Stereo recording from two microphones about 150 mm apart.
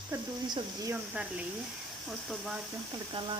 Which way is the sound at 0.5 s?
20° right (ahead or behind).